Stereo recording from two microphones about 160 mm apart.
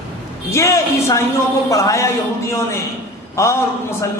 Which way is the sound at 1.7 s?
20° left (ahead or behind).